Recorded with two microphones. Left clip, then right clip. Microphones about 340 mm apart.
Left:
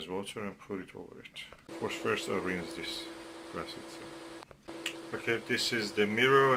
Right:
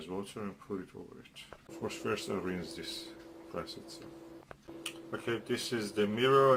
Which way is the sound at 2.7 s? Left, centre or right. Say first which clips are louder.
Left 4 dB; left.